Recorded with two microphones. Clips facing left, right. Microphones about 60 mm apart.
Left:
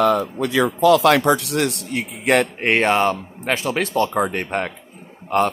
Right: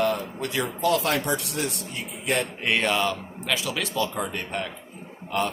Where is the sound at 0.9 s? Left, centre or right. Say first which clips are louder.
Left 10 dB; left.